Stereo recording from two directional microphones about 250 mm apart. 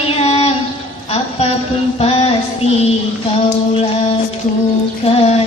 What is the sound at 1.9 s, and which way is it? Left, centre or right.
Music, left.